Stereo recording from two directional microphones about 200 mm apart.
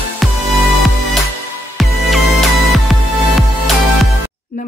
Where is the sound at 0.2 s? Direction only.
Centre (ahead or behind).